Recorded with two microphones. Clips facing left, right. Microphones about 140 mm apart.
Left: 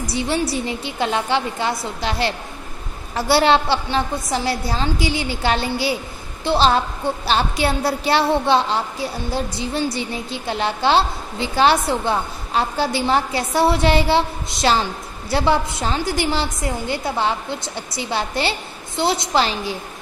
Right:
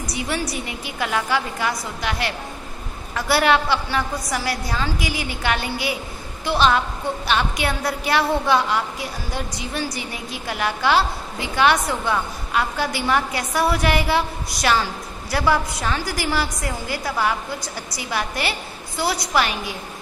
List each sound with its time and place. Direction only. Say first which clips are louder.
0.0 s a woman's voice: left 4 dB; 30° left (ahead or behind)